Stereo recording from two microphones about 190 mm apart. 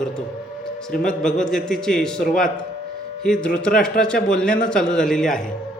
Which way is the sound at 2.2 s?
45° left (ahead or behind).